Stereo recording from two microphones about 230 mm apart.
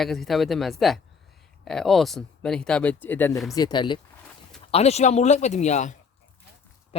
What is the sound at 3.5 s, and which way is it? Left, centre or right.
Speech, centre.